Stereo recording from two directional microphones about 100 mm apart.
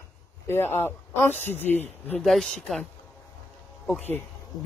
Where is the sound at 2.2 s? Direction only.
Centre (ahead or behind).